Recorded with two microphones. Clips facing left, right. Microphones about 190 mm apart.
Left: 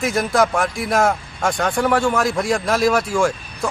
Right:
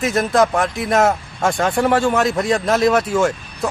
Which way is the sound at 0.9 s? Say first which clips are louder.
Right 2 dB; 25° right (ahead or behind).